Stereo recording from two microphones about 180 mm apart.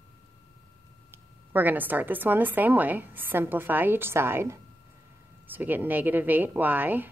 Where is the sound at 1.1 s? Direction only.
10° right (ahead or behind).